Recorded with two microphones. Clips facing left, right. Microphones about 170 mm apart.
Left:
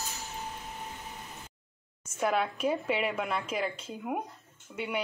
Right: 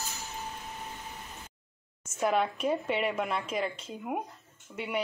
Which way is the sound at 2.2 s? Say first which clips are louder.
Right 1 dB; centre (ahead or behind).